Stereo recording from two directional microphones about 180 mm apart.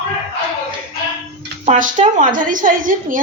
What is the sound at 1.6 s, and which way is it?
A woman's voice, 40° right (ahead or behind).